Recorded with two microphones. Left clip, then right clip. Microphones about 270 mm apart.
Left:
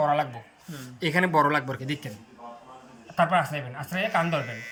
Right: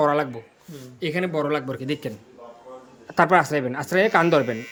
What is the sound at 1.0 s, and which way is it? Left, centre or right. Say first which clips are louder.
Speech: left 3 dB; centre.